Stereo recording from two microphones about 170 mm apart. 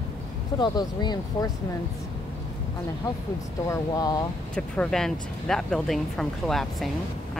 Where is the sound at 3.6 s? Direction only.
20° left (ahead or behind).